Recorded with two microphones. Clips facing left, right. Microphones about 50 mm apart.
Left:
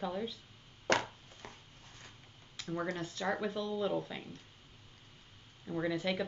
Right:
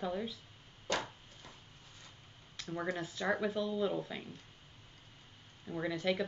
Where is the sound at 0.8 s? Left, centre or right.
Left.